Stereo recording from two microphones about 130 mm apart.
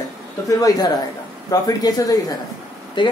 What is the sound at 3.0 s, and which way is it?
Speech, 40° left (ahead or behind).